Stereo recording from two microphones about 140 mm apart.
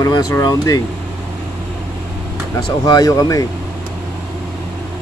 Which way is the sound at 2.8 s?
25° left (ahead or behind).